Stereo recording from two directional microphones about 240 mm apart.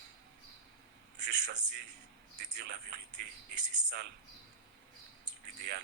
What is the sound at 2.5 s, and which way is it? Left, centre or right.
Speech, right.